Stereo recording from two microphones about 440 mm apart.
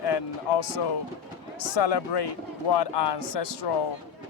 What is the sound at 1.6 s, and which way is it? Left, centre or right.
Speech, left.